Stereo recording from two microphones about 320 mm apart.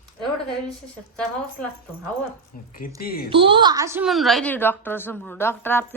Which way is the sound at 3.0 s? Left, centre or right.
Left.